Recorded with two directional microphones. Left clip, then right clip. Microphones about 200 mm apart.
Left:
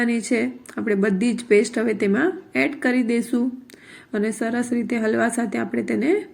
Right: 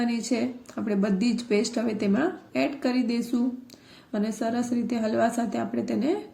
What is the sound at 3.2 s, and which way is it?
Speech, 30° left (ahead or behind).